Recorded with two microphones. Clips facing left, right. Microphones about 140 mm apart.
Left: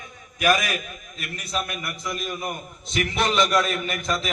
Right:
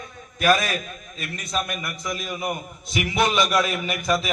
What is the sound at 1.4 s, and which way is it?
A man's voice, centre (ahead or behind).